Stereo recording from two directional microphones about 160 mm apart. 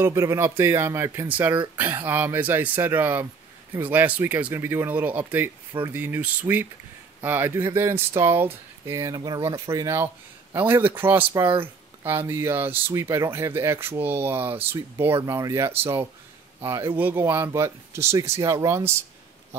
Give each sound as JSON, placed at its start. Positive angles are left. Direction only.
{"t": 0.0, "sound": "speech", "side_deg": -20}
{"t": 9.7, "sound": "speech", "side_deg": -20}